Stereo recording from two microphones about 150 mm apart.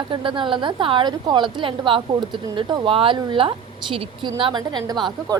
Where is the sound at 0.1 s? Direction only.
30° right (ahead or behind).